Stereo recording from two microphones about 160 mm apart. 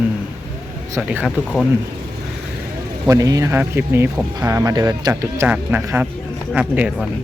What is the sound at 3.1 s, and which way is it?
Speech, 20° right (ahead or behind).